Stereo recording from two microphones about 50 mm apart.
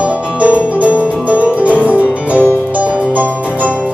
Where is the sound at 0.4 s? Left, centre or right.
Right.